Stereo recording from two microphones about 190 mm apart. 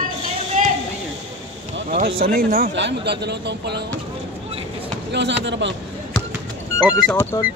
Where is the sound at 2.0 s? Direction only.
50° right (ahead or behind).